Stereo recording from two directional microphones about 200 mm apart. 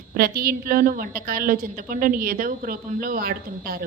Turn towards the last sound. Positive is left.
turn(degrees=-50)  # may be behind; listen again after turning